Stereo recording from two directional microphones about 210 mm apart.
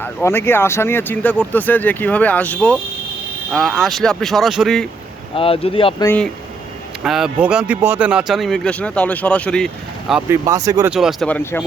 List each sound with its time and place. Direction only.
0.0 s speech: 10° left (ahead or behind)
5.3 s speech: 25° left (ahead or behind)
6.1 s speech: 5° left (ahead or behind)
10.7 s speech: 15° right (ahead or behind)
10.9 s speech: centre (ahead or behind)